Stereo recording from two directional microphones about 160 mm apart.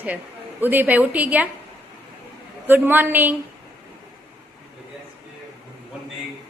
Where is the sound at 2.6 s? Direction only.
10° right (ahead or behind).